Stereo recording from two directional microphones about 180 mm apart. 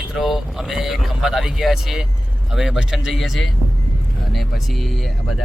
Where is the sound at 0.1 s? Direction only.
Centre (ahead or behind).